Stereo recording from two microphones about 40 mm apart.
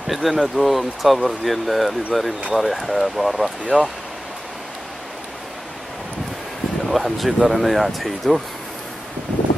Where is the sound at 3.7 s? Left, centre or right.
Right.